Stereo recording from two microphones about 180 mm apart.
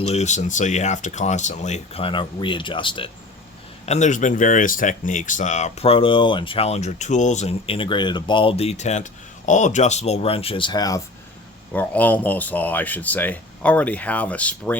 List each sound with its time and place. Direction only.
0.0 s speech: 35° left (ahead or behind)
3.8 s speech: 40° left (ahead or behind); by 11.0 s 20° left (ahead or behind)
11.7 s speech: 10° left (ahead or behind)